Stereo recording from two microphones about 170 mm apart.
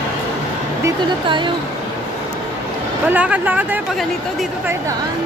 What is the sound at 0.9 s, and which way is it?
Speech, 25° right (ahead or behind).